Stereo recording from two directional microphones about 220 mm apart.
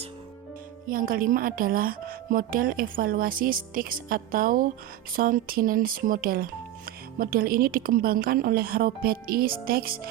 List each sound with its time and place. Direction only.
0.9 s speech: 40° right (ahead or behind)